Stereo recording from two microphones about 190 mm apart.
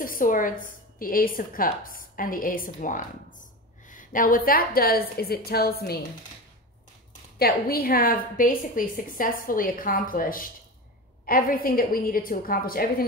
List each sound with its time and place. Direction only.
0.0 s a woman's voice: 45° left (ahead or behind)
7.3 s a woman's voice: 55° left (ahead or behind)